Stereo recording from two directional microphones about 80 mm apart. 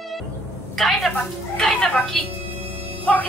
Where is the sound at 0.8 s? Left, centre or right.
Centre.